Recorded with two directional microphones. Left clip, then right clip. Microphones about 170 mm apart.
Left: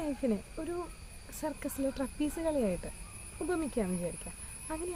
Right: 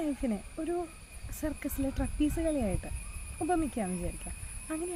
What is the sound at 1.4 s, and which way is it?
Speech, 15° left (ahead or behind).